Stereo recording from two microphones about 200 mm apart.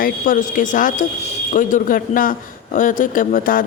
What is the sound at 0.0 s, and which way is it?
Speech, 40° left (ahead or behind).